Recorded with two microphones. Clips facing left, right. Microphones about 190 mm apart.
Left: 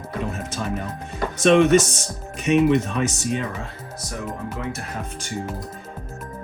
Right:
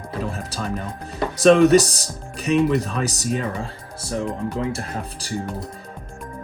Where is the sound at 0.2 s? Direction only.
35° right (ahead or behind).